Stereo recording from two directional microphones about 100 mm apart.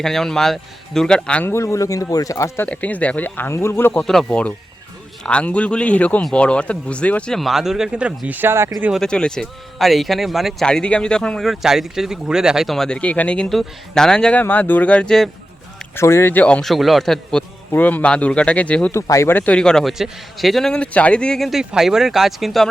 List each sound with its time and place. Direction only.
0.0 s speech: 5° left (ahead or behind)
1.5 s speech: 30° left (ahead or behind)
2.6 s speech: 15° left (ahead or behind)
4.0 s speech: 5° left (ahead or behind); by 8.7 s 25° right (ahead or behind)
9.0 s speech: 10° left (ahead or behind)
10.7 s speech: 10° left (ahead or behind)
16.0 s speech: 25° left (ahead or behind)
16.6 s speech: centre (ahead or behind)
17.7 s speech: 15° left (ahead or behind)
18.9 s speech: 30° left (ahead or behind)
19.3 s speech: 15° left (ahead or behind); by 22.7 s centre (ahead or behind)